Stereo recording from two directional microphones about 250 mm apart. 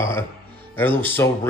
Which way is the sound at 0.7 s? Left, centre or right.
Centre.